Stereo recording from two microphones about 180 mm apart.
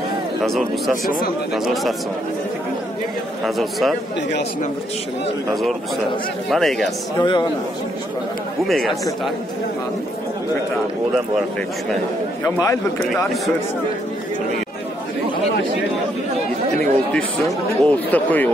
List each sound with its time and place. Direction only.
0.4 s speech: centre (ahead or behind)
3.4 s speech: centre (ahead or behind)
5.5 s speech: centre (ahead or behind)
7.2 s a man's voice: 25° left (ahead or behind)
8.6 s speech: centre (ahead or behind)
12.4 s a man's voice: 15° left (ahead or behind)
17.1 s a man's voice: 5° left (ahead or behind)